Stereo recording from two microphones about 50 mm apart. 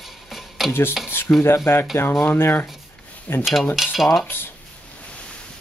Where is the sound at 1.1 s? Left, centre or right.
Left.